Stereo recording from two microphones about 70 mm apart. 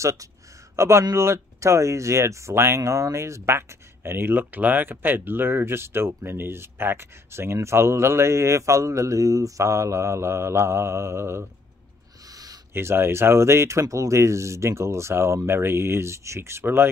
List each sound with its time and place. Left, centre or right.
0.0 s speech: right
12.7 s speech: right